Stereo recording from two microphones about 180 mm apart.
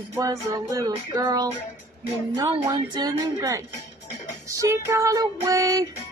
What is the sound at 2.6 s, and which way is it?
Music, 20° right (ahead or behind).